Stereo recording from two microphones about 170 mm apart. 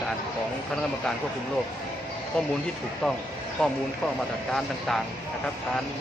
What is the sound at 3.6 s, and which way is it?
Speech, 5° left (ahead or behind).